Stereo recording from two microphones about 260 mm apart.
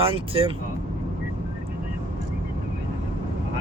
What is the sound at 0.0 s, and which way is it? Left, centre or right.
Speech, right.